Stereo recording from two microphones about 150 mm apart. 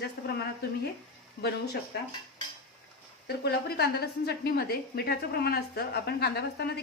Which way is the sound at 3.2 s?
90° left.